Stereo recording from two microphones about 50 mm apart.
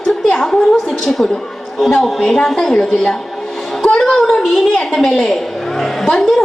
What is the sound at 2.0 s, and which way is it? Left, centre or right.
A woman's voice, centre.